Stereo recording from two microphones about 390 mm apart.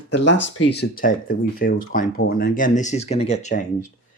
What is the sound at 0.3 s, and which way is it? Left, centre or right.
Speech, left.